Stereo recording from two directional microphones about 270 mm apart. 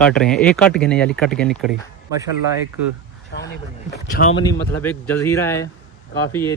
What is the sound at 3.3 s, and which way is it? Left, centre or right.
Speech, left.